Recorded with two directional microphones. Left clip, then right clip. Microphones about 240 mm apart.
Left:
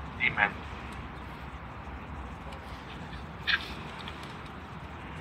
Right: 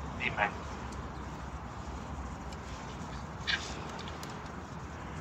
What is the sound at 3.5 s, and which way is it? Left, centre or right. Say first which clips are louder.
Duck: left 5 dB; centre.